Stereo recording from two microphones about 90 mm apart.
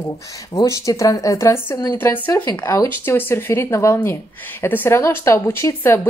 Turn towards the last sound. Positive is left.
turn(degrees=25)  # may be behind; listen again after turning